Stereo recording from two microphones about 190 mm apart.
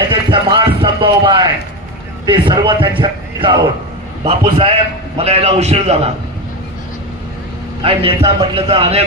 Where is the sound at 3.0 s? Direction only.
25° right (ahead or behind).